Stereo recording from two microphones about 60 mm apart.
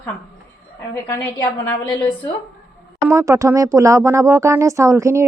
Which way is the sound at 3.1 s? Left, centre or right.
Right.